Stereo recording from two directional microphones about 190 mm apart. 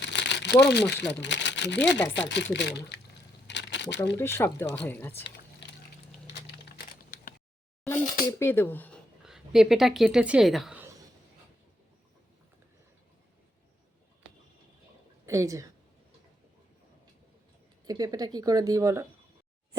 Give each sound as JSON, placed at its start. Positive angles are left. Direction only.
{"t": 0.0, "sound": "crumpling", "side_deg": 65}
{"t": 0.6, "sound": "speech", "side_deg": 65}
{"t": 3.4, "sound": "crumpling", "side_deg": 70}
{"t": 4.2, "sound": "speech", "side_deg": 15}
{"t": 7.9, "sound": "speech", "side_deg": 15}
{"t": 9.2, "sound": "a woman's voice", "side_deg": 0}
{"t": 15.3, "sound": "a woman's voice", "side_deg": -15}
{"t": 17.8, "sound": "speech", "side_deg": -20}